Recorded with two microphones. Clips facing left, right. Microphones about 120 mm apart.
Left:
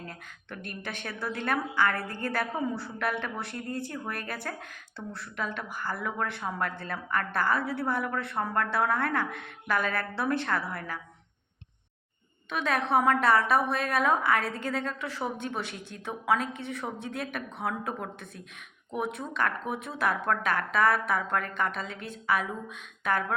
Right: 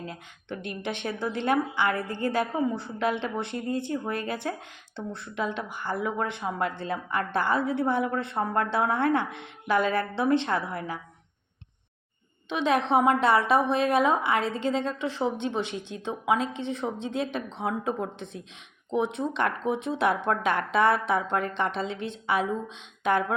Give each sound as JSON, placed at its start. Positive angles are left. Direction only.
{"t": 0.0, "sound": "speech", "side_deg": -20}
{"t": 12.5, "sound": "speech", "side_deg": -25}